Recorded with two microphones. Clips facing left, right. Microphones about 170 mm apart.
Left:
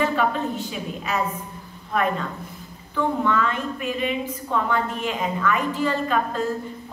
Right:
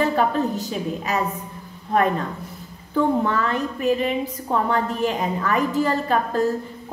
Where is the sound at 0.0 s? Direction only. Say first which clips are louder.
Right 2 dB; 40° right (ahead or behind).